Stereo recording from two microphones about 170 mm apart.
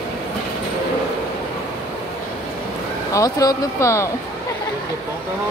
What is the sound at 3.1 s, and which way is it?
Speech, 20° left (ahead or behind).